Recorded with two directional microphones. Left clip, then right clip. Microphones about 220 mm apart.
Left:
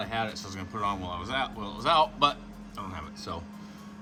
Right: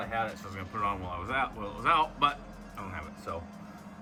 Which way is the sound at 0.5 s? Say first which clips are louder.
Left 1 dB; 20° left (ahead or behind).